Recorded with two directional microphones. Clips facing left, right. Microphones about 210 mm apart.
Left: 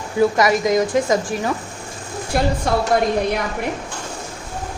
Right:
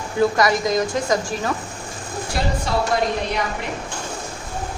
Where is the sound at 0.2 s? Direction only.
20° left (ahead or behind).